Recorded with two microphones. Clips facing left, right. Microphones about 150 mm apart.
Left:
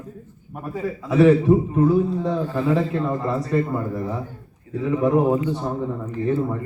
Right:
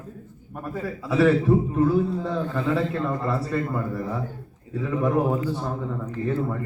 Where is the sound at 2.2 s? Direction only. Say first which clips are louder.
Left 3 dB; 10° left (ahead or behind).